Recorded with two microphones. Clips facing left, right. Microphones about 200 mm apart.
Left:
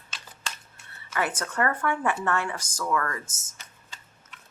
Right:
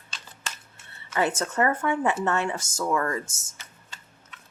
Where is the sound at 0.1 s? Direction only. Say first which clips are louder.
Even; centre (ahead or behind).